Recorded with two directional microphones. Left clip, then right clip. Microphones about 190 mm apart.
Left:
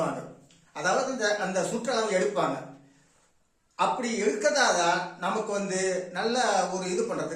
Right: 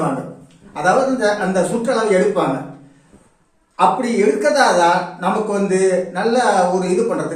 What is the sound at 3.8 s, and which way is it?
A man's voice, 15° left (ahead or behind).